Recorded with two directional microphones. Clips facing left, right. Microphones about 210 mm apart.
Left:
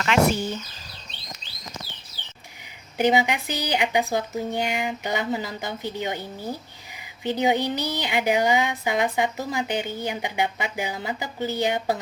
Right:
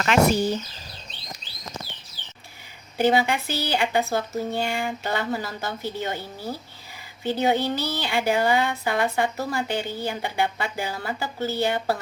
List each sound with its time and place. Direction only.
0.0 s speech: 40° right (ahead or behind)
3.0 s speech: 15° left (ahead or behind)